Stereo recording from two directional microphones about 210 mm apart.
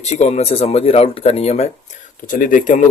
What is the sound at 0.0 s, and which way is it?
Speech, 30° left (ahead or behind).